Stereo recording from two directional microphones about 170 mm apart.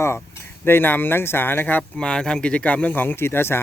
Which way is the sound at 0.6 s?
10° left (ahead or behind).